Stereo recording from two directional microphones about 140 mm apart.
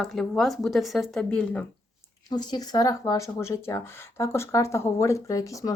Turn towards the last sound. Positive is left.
turn(degrees=25)  # may be behind; listen again after turning